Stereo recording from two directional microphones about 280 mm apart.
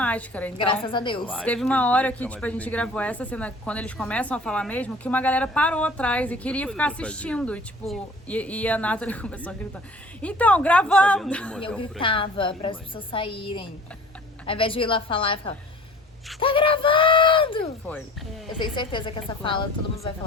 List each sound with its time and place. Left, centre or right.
0.0 s a woman's voice: centre
0.9 s a woman's voice: centre
1.3 s speech: centre
11.8 s a woman's voice: centre